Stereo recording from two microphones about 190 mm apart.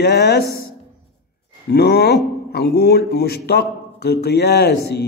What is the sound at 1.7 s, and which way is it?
Speech, 55° left (ahead or behind).